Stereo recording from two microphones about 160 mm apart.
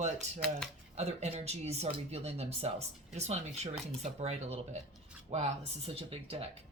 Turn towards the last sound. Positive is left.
turn(degrees=-35)  # may be behind; listen again after turning